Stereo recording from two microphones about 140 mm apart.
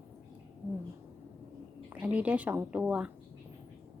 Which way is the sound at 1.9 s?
10° right (ahead or behind).